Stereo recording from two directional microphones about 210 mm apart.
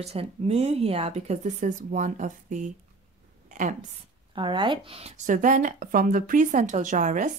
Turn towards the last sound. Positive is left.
turn(degrees=-35)  # may be behind; listen again after turning